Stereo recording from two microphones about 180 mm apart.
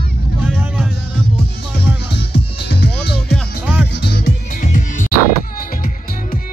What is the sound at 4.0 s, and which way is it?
Music, 65° left (ahead or behind).